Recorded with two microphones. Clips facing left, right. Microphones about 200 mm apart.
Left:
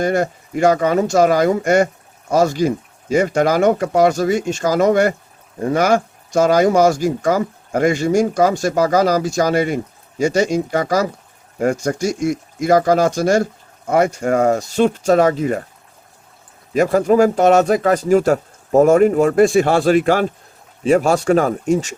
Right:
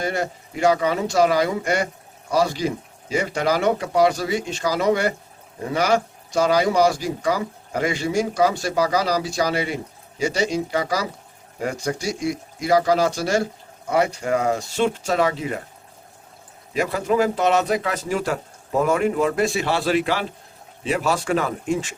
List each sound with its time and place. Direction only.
0.0 s speech: 45° left (ahead or behind)
16.7 s speech: 45° left (ahead or behind)